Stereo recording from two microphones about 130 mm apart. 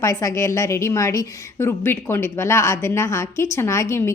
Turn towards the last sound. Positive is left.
turn(degrees=20)  # may be behind; listen again after turning